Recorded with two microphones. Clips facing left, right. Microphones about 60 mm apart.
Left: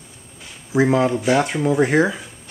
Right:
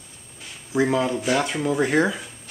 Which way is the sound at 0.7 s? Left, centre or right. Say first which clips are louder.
Left 4 dB; left.